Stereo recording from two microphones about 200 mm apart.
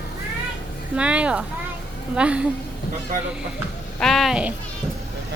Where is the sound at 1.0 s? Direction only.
5° right (ahead or behind).